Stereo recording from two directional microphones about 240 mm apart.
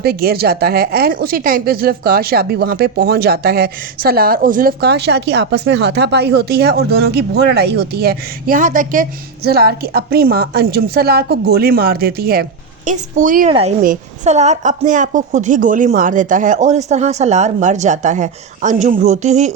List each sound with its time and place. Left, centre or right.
0.0 s a woman's voice: right